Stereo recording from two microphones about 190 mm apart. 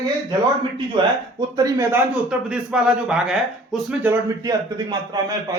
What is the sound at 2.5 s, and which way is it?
Speech, 5° right (ahead or behind).